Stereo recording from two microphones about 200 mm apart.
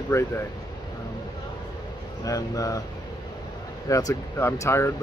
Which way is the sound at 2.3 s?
15° left (ahead or behind).